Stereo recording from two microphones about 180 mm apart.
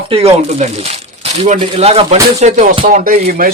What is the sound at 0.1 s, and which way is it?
Speech, 30° right (ahead or behind).